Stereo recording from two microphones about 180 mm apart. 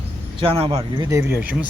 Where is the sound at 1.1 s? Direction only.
15° right (ahead or behind).